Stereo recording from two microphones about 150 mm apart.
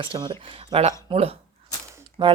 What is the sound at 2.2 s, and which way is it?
Speech, 30° right (ahead or behind).